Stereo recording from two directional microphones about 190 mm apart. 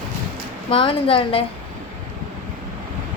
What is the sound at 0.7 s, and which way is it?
Speech, 30° left (ahead or behind).